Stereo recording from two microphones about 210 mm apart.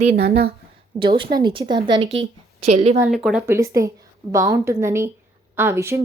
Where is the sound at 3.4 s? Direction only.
15° right (ahead or behind).